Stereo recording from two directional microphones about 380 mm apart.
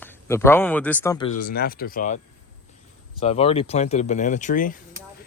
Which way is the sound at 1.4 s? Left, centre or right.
Left.